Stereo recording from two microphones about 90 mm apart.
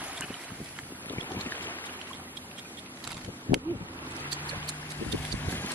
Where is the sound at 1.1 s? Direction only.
20° left (ahead or behind).